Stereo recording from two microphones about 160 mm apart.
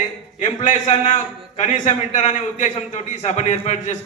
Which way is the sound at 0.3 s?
50° left (ahead or behind).